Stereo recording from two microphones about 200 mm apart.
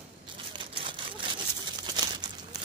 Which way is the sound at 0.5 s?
25° right (ahead or behind).